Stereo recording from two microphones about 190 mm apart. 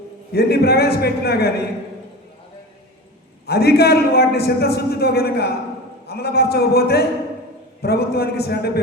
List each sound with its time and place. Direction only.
0.3 s a man's voice: 55° left (ahead or behind)
3.4 s a man's voice: 55° left (ahead or behind)